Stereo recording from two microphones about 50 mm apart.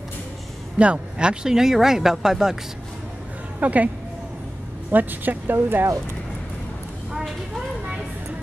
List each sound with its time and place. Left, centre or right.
0.7 s speech: right
3.5 s a woman's voice: right
4.9 s speech: right
7.1 s vehicle: centre